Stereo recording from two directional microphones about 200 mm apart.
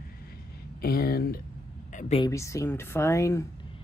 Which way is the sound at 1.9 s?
40° left (ahead or behind).